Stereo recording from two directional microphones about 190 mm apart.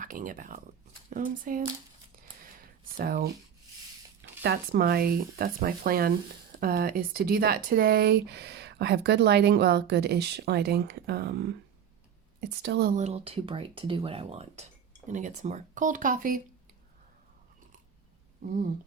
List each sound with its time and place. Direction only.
0.0 s speech: 45° right (ahead or behind)
2.4 s a sound: 50° right (ahead or behind)
4.4 s a woman's voice: 55° right (ahead or behind)
12.9 s speech: 40° right (ahead or behind)